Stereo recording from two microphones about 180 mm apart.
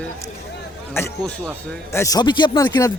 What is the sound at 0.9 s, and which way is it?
A man's voice, 15° left (ahead or behind).